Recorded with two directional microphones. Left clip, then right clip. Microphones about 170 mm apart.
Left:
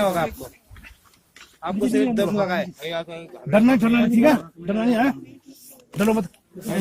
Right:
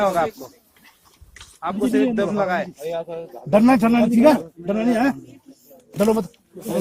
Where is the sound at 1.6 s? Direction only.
15° right (ahead or behind).